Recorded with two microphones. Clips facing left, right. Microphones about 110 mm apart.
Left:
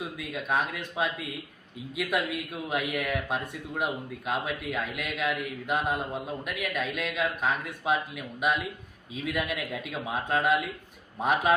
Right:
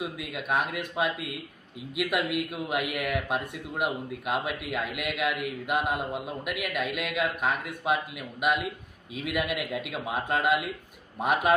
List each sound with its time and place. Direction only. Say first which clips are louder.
0.0 s a man's voice: right 1 dB; 10° right (ahead or behind)